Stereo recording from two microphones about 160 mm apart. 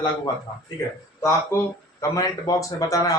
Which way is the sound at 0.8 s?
15° left (ahead or behind).